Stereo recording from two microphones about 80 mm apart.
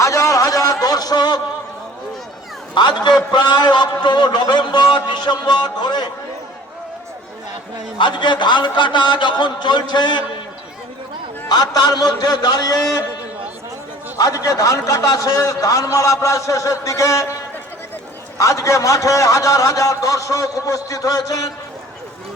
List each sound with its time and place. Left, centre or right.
0.0 s a sound: left
2.7 s a man's voice: left
7.9 s a man's voice: left
11.4 s a man's voice: left
14.2 s a man's voice: left
18.3 s a man's voice: left